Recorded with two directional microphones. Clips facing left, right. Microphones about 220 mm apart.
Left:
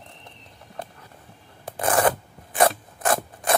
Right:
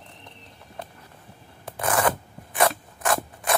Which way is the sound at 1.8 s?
35° left (ahead or behind).